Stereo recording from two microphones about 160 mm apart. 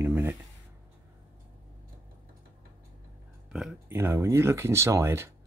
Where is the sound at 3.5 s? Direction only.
5° right (ahead or behind).